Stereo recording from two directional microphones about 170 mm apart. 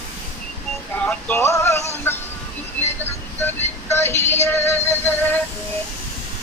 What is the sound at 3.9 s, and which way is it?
Synthetic singing, 15° left (ahead or behind).